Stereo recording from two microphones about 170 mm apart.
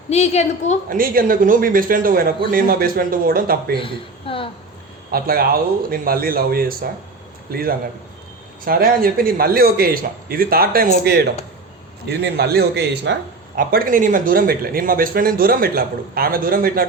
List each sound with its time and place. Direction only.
0.1 s a woman's voice: 40° left (ahead or behind)
0.9 s a man's voice: 55° right (ahead or behind)
3.8 s a woman's voice: 30° left (ahead or behind)
5.1 s a man's voice: 60° right (ahead or behind); by 13.1 s 80° right
13.6 s a man's voice: 55° right (ahead or behind)